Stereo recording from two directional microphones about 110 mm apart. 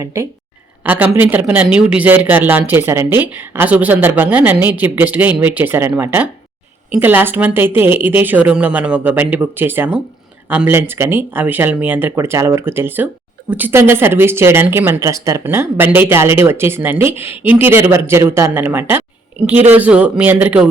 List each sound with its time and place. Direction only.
0.0 s speech: 30° right (ahead or behind)
0.9 s speech: 15° right (ahead or behind)